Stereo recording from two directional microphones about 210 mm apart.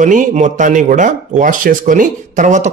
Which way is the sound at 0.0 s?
35° right (ahead or behind).